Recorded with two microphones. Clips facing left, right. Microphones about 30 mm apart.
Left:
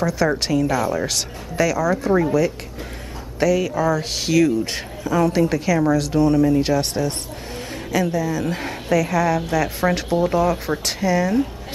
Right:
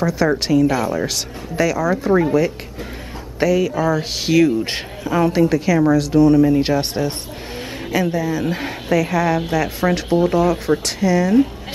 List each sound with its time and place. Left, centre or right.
0.0 s a woman's voice: centre; by 5.3 s right
5.3 s speech: centre
6.4 s a woman's voice: centre
9.8 s speech: centre
10.0 s speech: centre